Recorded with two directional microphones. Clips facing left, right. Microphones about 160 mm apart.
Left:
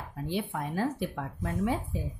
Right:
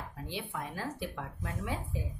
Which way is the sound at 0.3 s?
45° left (ahead or behind).